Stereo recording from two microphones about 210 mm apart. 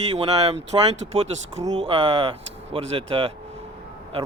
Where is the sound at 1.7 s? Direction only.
25° right (ahead or behind).